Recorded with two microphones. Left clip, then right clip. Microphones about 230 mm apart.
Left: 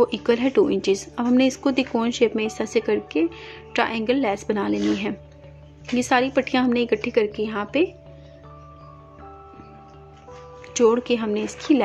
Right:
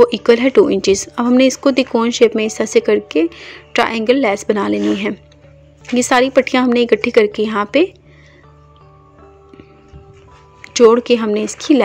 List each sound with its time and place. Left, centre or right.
0.0 s a woman's voice: centre
10.6 s a woman's voice: centre